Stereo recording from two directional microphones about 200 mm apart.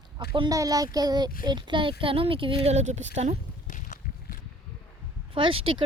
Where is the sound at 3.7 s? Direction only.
40° left (ahead or behind).